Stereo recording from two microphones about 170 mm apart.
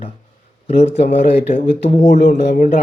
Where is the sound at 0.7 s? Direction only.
40° left (ahead or behind).